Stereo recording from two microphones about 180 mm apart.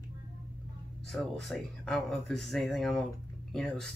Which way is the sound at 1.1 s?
Centre (ahead or behind).